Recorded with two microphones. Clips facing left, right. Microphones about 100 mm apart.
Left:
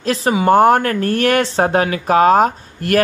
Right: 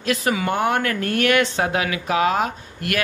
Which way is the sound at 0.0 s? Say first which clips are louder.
Left 5 dB; 30° left (ahead or behind).